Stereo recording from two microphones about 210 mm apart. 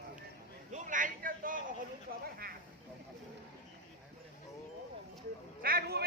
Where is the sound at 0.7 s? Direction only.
35° right (ahead or behind).